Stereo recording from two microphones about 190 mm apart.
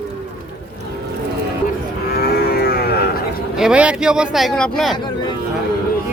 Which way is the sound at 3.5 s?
5° right (ahead or behind).